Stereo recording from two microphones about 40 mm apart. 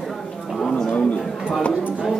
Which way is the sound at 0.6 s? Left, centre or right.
Centre.